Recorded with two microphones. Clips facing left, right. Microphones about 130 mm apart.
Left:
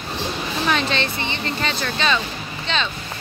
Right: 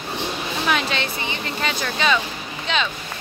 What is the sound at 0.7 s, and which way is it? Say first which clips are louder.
A woman's voice: left 1 dB; 5° right (ahead or behind).